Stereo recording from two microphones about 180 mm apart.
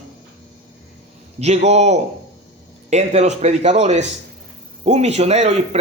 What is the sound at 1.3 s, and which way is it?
Speech, 35° right (ahead or behind).